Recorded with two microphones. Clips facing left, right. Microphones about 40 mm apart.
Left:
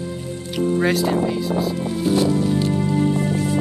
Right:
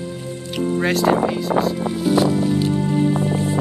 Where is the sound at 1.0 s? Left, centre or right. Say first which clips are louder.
Right 3 dB; right.